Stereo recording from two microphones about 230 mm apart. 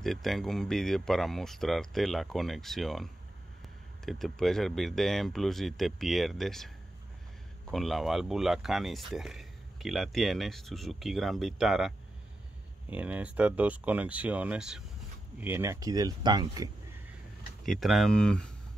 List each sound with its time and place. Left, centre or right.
0.0 s speech: centre
7.7 s speech: centre
12.9 s speech: centre
17.6 s speech: centre